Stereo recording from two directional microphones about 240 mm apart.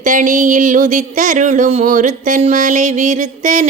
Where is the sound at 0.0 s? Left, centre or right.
Right.